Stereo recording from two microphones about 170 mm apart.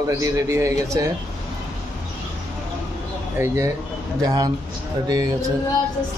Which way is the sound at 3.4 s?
15° right (ahead or behind).